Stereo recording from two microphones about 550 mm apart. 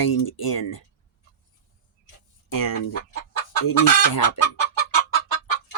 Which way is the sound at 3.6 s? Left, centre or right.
Left.